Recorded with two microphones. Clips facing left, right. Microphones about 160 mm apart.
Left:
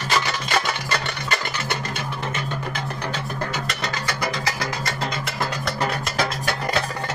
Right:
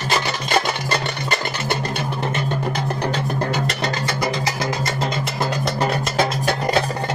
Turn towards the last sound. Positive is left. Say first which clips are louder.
# right 5 dB
turn(degrees=-25)  # may be behind; listen again after turning